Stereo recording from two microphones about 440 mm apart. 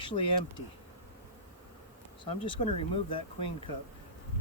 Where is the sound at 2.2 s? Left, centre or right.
Centre.